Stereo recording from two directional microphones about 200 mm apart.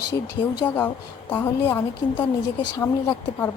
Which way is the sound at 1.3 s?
10° left (ahead or behind).